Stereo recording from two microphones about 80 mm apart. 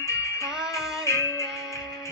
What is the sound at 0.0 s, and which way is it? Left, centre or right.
Music, left.